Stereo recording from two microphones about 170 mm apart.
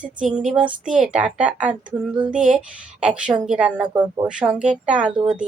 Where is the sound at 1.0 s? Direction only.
5° right (ahead or behind).